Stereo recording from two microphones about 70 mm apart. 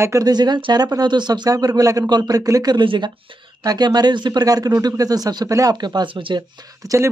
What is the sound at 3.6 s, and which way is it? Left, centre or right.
Speech, right.